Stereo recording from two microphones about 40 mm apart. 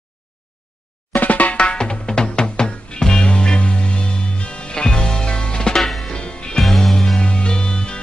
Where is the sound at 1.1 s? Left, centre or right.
Left.